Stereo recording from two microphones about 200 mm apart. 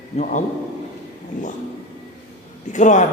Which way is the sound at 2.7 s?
40° left (ahead or behind).